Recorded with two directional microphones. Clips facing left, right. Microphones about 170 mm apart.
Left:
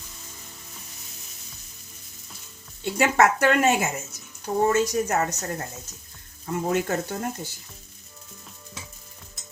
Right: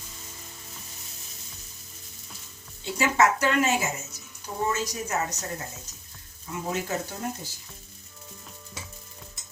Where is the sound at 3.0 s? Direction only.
60° left (ahead or behind).